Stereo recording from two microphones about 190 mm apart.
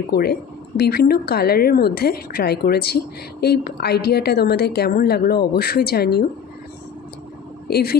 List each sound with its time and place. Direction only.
0.1 s speech: 55° left (ahead or behind)
7.6 s speech: 55° left (ahead or behind)